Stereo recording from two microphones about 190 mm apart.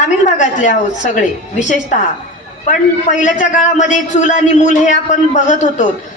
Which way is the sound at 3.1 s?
40° left (ahead or behind).